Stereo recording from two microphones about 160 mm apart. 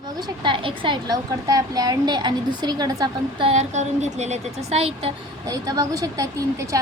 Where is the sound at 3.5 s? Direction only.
45° right (ahead or behind).